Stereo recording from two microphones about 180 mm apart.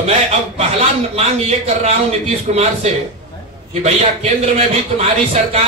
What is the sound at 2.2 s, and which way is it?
A man's voice, 35° right (ahead or behind).